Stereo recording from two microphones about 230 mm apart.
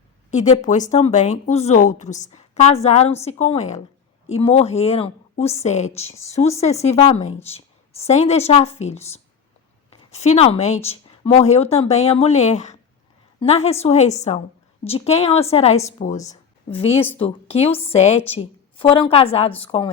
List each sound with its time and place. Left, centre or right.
0.3 s speech: left